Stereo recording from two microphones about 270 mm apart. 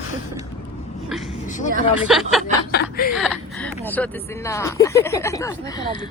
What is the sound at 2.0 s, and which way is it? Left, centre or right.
Speech, centre.